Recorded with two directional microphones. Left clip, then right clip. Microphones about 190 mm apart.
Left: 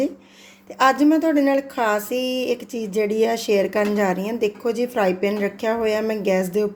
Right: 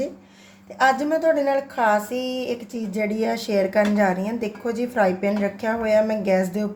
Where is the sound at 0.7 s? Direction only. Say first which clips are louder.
Left 3 dB; 40° left (ahead or behind).